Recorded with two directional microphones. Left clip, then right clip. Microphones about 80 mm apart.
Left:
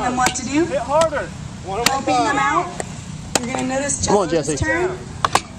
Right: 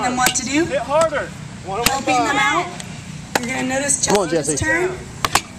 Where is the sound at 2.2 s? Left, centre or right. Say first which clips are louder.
Even; right.